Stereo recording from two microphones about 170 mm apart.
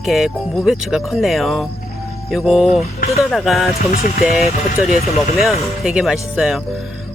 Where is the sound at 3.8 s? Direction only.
60° left (ahead or behind).